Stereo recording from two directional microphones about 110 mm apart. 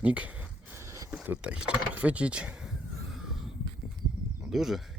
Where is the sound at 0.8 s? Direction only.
30° right (ahead or behind).